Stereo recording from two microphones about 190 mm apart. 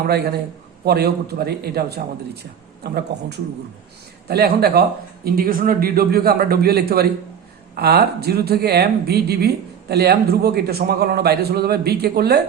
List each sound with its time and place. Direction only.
0.0 s speech: 55° right (ahead or behind)